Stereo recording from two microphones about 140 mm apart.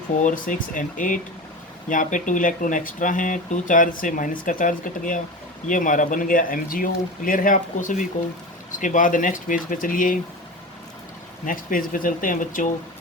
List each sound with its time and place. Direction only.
0.3 s speech: 70° left (ahead or behind)
11.4 s speech: 80° left